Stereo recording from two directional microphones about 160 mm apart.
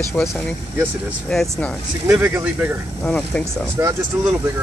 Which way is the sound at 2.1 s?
10° right (ahead or behind).